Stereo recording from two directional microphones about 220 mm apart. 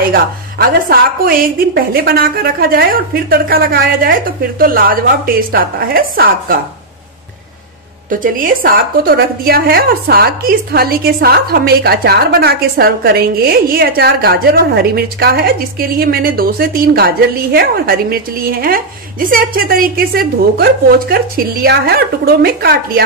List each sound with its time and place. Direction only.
0.1 s a woman's voice: 45° right (ahead or behind)
8.1 s a woman's voice: 40° right (ahead or behind)